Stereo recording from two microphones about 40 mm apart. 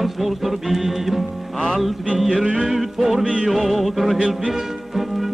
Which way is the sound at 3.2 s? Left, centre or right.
Right.